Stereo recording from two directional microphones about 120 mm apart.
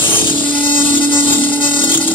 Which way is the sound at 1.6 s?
45° left (ahead or behind).